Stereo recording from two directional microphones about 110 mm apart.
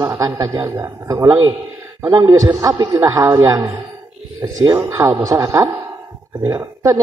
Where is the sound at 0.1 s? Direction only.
25° right (ahead or behind).